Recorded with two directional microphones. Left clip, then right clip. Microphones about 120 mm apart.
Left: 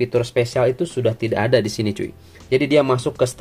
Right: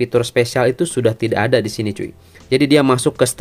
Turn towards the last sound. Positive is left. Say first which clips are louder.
# right 4 dB
turn(degrees=-85)